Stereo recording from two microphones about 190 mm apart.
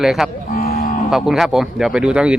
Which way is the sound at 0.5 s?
50° left (ahead or behind).